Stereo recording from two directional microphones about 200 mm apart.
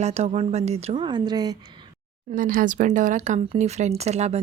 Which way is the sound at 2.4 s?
45° right (ahead or behind).